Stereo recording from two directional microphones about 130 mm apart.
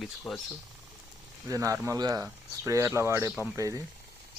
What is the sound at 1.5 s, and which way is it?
Speech, 25° right (ahead or behind).